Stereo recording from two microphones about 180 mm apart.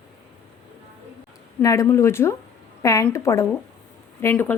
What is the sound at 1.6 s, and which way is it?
Speech, 15° left (ahead or behind).